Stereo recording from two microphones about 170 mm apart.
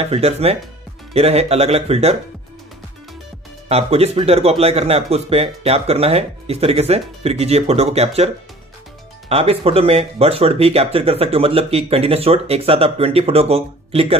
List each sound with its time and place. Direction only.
0.0 s speech: 35° right (ahead or behind)
3.6 s speech: 35° right (ahead or behind)
9.3 s speech: 35° right (ahead or behind)